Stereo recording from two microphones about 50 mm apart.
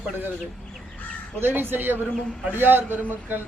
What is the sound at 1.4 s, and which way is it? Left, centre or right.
A man's voice, right.